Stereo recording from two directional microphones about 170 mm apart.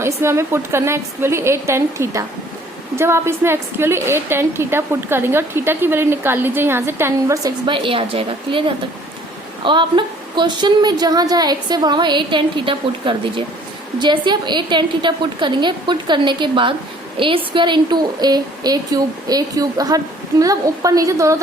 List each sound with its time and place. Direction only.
0.2 s a woman's voice: 15° right (ahead or behind)
7.7 s a woman's voice: 30° right (ahead or behind)